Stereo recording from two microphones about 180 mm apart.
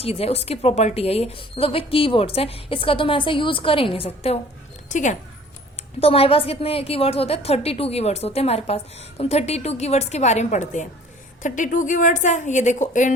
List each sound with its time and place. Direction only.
0.0 s a woman's voice: 35° left (ahead or behind)
6.0 s a woman's voice: 30° left (ahead or behind)